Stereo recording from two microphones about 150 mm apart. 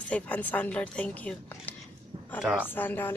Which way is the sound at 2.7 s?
15° left (ahead or behind).